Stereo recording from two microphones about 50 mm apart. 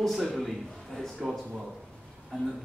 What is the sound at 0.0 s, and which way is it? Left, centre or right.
Speech, centre.